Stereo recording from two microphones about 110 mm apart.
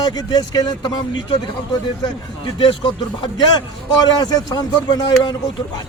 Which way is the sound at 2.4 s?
45° left (ahead or behind).